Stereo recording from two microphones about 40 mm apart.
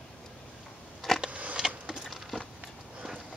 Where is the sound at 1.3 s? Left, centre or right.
Right.